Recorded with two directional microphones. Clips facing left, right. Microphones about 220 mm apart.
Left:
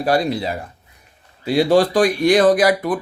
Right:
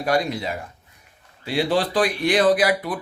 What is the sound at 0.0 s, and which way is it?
Speech, 35° left (ahead or behind).